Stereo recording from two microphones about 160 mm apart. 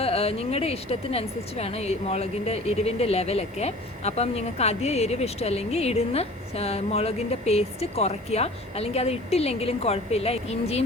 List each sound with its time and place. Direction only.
0.0 s speech: 40° left (ahead or behind)